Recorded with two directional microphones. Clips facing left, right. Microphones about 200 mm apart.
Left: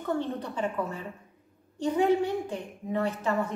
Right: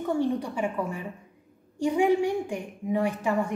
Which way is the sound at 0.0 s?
10° right (ahead or behind).